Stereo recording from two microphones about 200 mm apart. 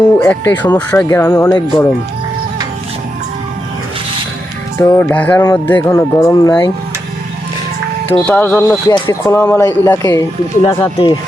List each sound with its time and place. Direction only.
0.2 s speech: 10° left (ahead or behind)
4.8 s speech: 10° left (ahead or behind)
8.2 s speech: 5° left (ahead or behind); by 11.1 s 25° left (ahead or behind)